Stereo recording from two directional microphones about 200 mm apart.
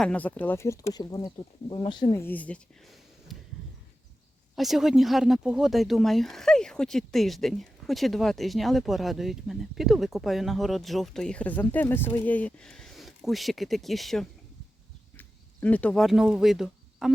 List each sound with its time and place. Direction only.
0.0 s speech: 5° left (ahead or behind); by 2.2 s 20° left (ahead or behind)
2.2 s speech: 10° left (ahead or behind)
3.3 s a sound: centre (ahead or behind)
4.5 s speech: centre (ahead or behind)